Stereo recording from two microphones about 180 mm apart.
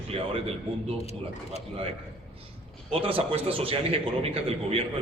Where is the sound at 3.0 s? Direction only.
30° right (ahead or behind).